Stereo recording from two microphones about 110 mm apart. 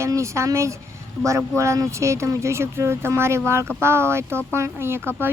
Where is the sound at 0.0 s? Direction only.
25° right (ahead or behind).